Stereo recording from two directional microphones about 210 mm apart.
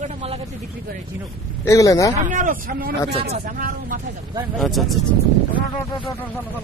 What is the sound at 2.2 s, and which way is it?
Speech, 40° right (ahead or behind).